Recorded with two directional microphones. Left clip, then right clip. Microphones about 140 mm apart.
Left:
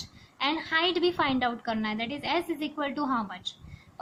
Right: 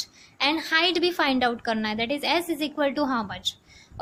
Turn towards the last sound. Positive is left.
turn(degrees=-35)  # may be behind; listen again after turning